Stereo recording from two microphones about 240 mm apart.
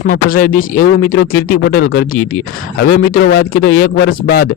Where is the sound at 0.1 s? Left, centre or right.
Left.